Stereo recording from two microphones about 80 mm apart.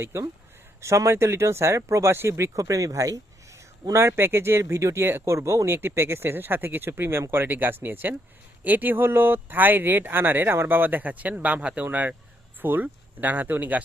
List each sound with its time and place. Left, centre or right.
0.0 s speech: right
3.9 s speech: right